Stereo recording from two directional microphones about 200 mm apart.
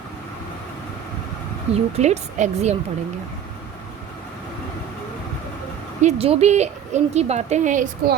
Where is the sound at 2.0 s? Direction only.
35° right (ahead or behind).